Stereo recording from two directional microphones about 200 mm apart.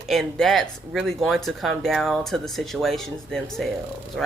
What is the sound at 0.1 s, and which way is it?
Speech, centre (ahead or behind).